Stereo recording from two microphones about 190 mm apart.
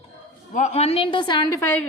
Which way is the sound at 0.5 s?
35° left (ahead or behind).